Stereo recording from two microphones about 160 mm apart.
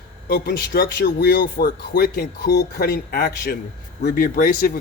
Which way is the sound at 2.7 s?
70° left (ahead or behind).